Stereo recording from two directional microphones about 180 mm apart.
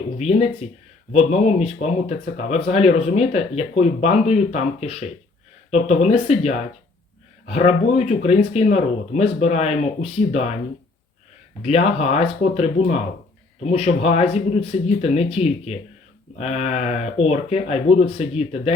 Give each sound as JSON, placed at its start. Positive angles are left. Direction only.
{"t": 0.2, "sound": "speech", "side_deg": 35}
{"t": 11.6, "sound": "speech", "side_deg": 35}